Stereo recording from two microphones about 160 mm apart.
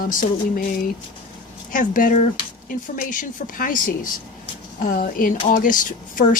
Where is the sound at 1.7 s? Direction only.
55° left (ahead or behind).